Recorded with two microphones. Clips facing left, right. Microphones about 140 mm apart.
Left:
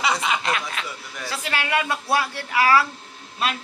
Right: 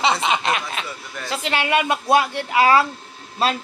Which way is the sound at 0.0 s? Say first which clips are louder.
Right 3 dB; 25° right (ahead or behind).